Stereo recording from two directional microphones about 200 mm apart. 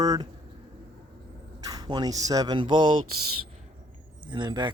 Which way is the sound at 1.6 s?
20° right (ahead or behind).